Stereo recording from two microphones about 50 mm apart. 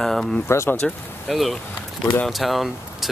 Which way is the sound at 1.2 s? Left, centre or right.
Centre.